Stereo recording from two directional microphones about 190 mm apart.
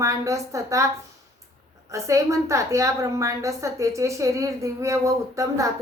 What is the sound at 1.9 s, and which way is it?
A woman's voice, 15° right (ahead or behind).